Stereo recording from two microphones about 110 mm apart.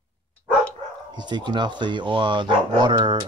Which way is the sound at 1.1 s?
40° right (ahead or behind).